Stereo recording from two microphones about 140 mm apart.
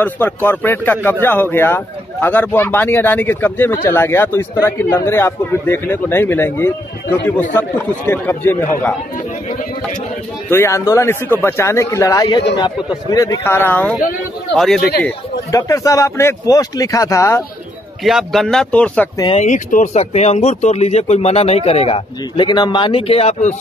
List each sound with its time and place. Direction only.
0.0 s a man's voice: 15° left (ahead or behind)
10.5 s a man's voice: 20° left (ahead or behind)
12.4 s speech: 35° left (ahead or behind); by 14.9 s 5° left (ahead or behind)
15.5 s speech: 25° left (ahead or behind)
18.0 s speech: centre (ahead or behind)
19.3 s speech: 60° left (ahead or behind)